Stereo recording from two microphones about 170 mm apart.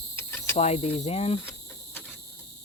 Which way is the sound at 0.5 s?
35° left (ahead or behind).